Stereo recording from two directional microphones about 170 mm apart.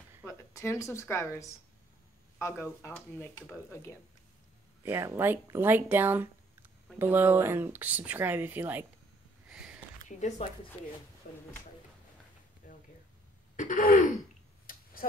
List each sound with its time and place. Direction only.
0.2 s speech: 15° left (ahead or behind)
4.8 s speech: 15° right (ahead or behind)
9.5 s a sound: 5° right (ahead or behind)
10.0 s speech: 45° left (ahead or behind)
11.3 s speech: 55° left (ahead or behind)
12.6 s a sound: 50° left (ahead or behind)
13.6 s throat clearing: 50° left (ahead or behind)